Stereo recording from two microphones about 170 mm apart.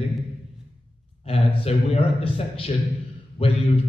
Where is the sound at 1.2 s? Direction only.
35° left (ahead or behind).